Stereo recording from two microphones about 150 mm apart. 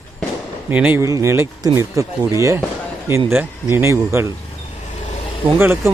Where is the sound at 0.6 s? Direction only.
10° right (ahead or behind).